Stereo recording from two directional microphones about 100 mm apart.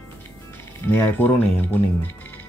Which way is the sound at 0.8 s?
20° left (ahead or behind).